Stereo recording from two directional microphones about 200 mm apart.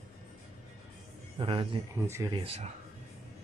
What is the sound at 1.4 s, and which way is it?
Speech, 25° right (ahead or behind).